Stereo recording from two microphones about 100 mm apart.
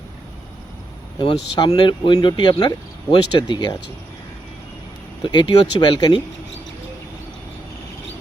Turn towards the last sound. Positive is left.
turn(degrees=50)  # may be behind; listen again after turning